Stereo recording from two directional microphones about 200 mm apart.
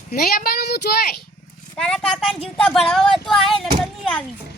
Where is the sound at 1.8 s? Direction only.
5° left (ahead or behind).